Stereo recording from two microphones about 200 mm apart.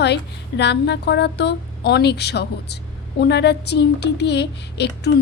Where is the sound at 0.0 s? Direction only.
60° left (ahead or behind).